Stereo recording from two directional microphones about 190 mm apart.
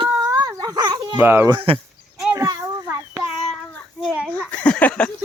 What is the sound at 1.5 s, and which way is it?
Speech, 30° right (ahead or behind).